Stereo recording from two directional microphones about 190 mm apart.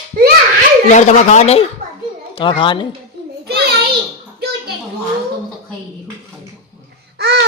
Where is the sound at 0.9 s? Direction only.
40° left (ahead or behind).